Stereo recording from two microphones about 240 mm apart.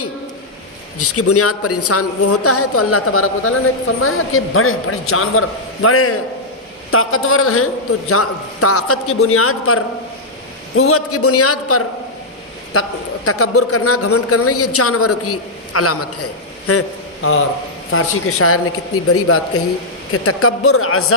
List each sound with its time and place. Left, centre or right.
0.9 s a man's voice: left
13.2 s a man's voice: left